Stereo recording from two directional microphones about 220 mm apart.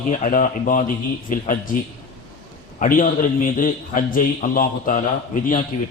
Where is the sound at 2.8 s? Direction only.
35° left (ahead or behind).